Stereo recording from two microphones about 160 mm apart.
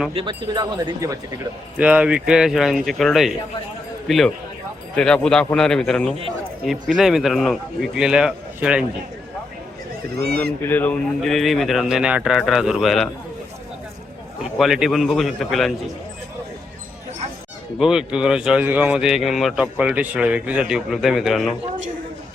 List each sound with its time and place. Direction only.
0.1 s speech: 35° right (ahead or behind)
1.8 s speech: 10° right (ahead or behind)
10.6 s speech: 10° left (ahead or behind)
14.6 s speech: centre (ahead or behind)
17.7 s speech: 5° right (ahead or behind)